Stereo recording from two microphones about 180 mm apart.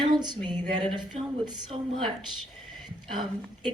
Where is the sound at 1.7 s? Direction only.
30° right (ahead or behind).